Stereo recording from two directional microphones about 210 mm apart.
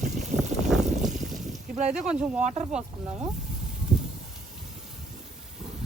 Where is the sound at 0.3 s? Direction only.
Centre (ahead or behind).